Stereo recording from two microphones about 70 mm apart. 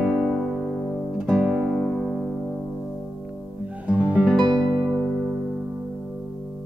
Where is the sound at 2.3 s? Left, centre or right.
Centre.